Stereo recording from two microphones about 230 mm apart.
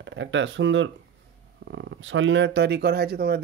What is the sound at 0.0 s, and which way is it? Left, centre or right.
Speech, right.